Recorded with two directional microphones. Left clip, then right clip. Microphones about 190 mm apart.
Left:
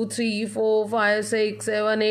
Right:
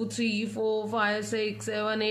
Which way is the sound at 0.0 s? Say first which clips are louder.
Left 4 dB; 35° left (ahead or behind).